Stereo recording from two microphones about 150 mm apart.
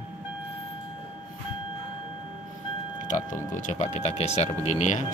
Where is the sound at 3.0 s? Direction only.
60° left (ahead or behind).